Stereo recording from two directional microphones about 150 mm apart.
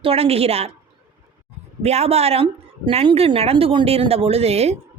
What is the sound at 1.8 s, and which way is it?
A woman's voice, 45° right (ahead or behind).